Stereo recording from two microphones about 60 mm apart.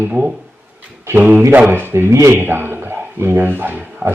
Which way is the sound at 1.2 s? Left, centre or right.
Right.